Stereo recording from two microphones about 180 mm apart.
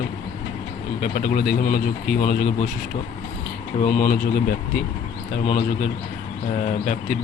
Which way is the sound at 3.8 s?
45° left (ahead or behind).